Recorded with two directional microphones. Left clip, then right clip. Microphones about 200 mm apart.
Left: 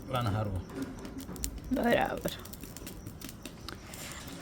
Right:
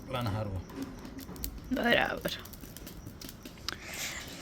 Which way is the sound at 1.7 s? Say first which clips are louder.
Right 1 dB; 10° left (ahead or behind).